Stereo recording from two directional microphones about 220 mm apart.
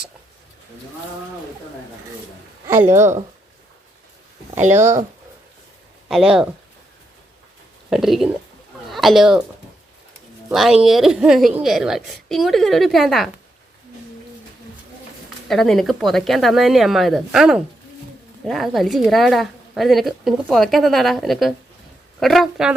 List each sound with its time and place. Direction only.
2.6 s a woman's voice: 10° right (ahead or behind)
4.5 s speech: 30° right (ahead or behind)
4.8 s a woman's voice: 15° right (ahead or behind)
6.1 s a woman's voice: centre (ahead or behind)
7.9 s a woman's voice: centre (ahead or behind)
10.5 s a woman's voice: centre (ahead or behind)
15.4 s a woman's voice: centre (ahead or behind)